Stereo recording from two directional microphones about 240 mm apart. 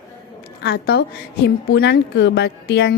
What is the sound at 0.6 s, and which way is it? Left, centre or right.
Speech, left.